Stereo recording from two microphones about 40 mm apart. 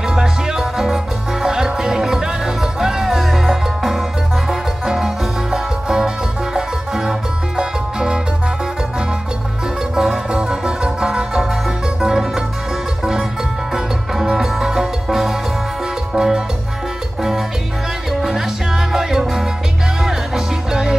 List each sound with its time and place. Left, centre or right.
0.1 s music: centre
9.9 s music: centre
10.3 s music: centre
13.7 s music: centre
18.2 s music: centre